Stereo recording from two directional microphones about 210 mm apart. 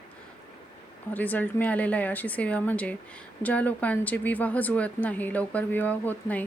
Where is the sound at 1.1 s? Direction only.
10° left (ahead or behind).